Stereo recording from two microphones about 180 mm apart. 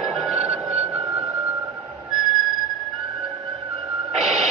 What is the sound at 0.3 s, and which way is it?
Music, 35° right (ahead or behind).